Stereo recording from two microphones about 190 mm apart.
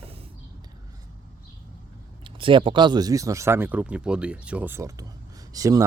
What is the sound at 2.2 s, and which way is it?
Speech, 25° right (ahead or behind).